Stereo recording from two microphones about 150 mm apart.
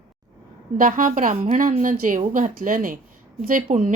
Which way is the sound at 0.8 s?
60° right (ahead or behind).